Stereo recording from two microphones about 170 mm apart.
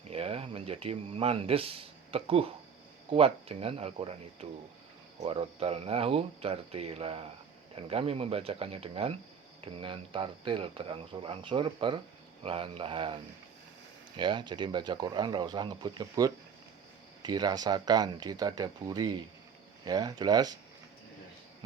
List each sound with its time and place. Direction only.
0.1 s speech: 35° right (ahead or behind)
14.2 s speech: 25° right (ahead or behind)